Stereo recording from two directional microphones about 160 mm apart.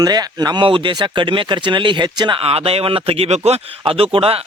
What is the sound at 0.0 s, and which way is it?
Speech, 25° right (ahead or behind).